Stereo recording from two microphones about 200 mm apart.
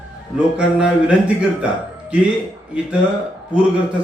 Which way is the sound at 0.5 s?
5° right (ahead or behind).